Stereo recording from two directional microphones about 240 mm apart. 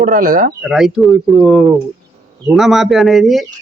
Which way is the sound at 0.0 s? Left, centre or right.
Right.